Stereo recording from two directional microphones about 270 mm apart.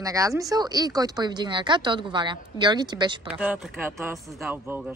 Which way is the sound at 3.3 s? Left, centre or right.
Centre.